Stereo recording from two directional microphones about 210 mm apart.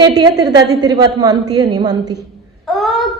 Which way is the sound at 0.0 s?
20° right (ahead or behind).